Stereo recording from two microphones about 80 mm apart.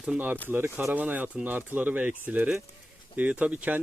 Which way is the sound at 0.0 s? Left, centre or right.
Centre.